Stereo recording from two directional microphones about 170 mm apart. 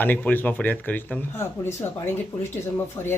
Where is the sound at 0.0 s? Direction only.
10° left (ahead or behind).